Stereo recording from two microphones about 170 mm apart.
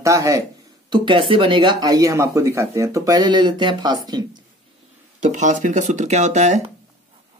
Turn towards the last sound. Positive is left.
turn(degrees=-45)  # may be behind; listen again after turning